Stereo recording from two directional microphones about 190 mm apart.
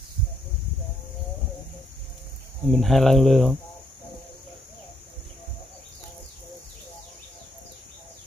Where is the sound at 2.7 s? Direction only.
Centre (ahead or behind).